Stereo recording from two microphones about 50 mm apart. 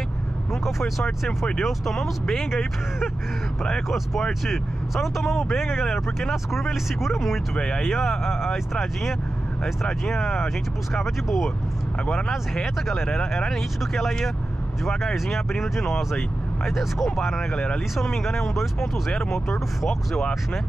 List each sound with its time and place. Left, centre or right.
0.7 s speech: centre
4.3 s speech: centre
7.5 s speech: centre
7.8 s speech: centre
12.6 s speech: centre
19.8 s speech: centre